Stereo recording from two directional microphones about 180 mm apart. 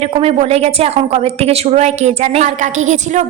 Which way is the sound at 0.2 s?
35° right (ahead or behind).